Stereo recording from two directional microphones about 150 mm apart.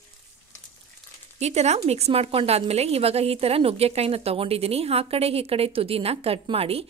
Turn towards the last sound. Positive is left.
turn(degrees=-40)  # may be behind; listen again after turning